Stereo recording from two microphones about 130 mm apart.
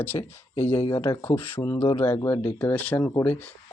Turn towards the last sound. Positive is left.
turn(degrees=10)  # may be behind; listen again after turning